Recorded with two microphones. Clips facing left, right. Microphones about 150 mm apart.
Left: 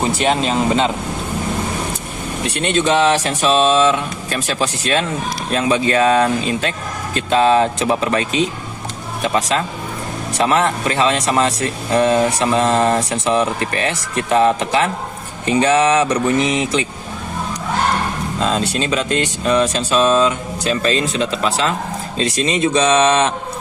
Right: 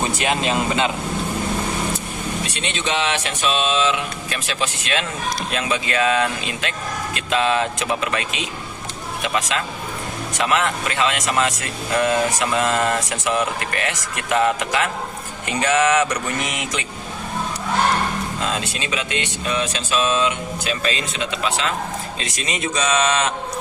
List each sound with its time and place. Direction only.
0.2 s speech: 35° left (ahead or behind)
2.5 s speech: 50° left (ahead or behind); by 16.1 s 30° left (ahead or behind)
18.4 s speech: 35° left (ahead or behind)